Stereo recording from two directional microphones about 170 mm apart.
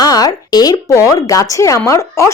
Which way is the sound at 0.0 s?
20° left (ahead or behind).